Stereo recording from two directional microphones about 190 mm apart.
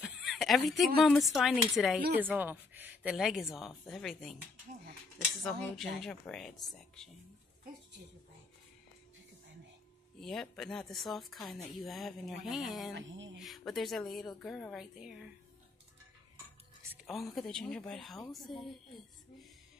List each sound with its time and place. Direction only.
0.0 s a woman's voice: centre (ahead or behind)
5.4 s speech: centre (ahead or behind)
10.2 s speech: centre (ahead or behind)
12.9 s a sound: 75° right (ahead or behind)
13.4 s speech: centre (ahead or behind)
16.9 s speech: centre (ahead or behind)